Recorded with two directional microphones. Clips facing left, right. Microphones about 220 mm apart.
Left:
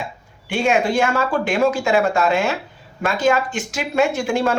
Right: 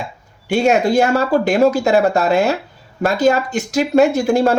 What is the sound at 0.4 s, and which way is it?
Speech, 40° right (ahead or behind).